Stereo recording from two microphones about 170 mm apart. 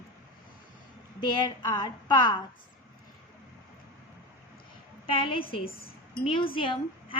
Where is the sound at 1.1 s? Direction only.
25° left (ahead or behind).